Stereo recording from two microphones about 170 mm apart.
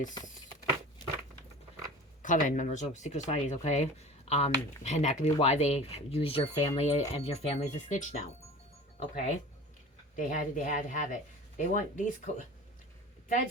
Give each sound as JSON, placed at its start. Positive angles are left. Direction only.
{"t": 2.2, "sound": "speech", "side_deg": 50}